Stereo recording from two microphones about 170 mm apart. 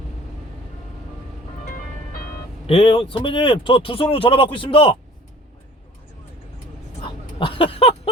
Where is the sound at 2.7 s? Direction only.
35° left (ahead or behind).